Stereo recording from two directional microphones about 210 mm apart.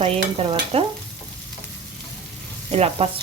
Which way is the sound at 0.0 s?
30° right (ahead or behind).